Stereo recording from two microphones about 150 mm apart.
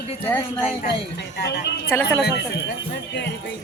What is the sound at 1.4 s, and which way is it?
Speech, 90° left.